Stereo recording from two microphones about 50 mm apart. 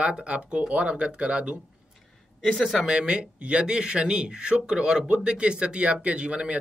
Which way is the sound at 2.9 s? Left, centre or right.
Centre.